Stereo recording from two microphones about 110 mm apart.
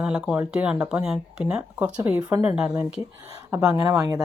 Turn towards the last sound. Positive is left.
turn(degrees=-30)  # may be behind; listen again after turning